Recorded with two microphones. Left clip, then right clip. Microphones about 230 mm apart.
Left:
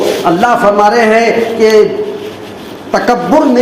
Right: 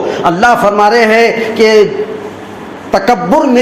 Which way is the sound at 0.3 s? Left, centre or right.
Right.